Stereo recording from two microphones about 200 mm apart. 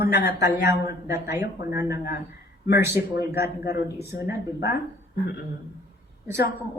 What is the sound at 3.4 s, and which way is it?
Speech, 55° left (ahead or behind).